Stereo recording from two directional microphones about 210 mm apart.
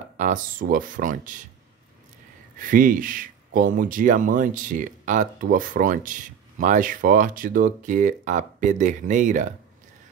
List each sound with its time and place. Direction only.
0.2 s speech: 40° right (ahead or behind)
2.6 s speech: 40° right (ahead or behind)